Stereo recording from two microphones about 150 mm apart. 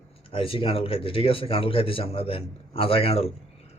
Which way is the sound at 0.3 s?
35° left (ahead or behind).